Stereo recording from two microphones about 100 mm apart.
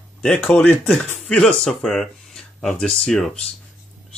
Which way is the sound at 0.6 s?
20° left (ahead or behind).